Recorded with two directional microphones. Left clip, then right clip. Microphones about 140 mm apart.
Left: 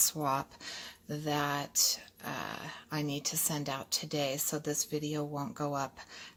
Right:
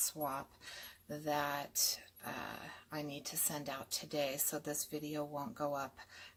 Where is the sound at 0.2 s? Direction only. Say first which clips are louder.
Left 8 dB; 40° left (ahead or behind).